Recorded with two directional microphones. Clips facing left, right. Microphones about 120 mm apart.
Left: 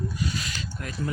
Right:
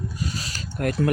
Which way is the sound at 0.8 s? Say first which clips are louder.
Right 16 dB; 55° right (ahead or behind).